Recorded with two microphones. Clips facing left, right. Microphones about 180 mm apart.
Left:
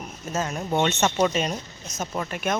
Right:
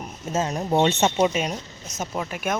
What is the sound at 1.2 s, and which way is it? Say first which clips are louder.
Speech: right 1 dB; 10° right (ahead or behind).